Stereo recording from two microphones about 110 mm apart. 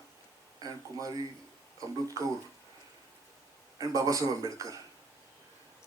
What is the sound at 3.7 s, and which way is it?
Speech, 35° right (ahead or behind).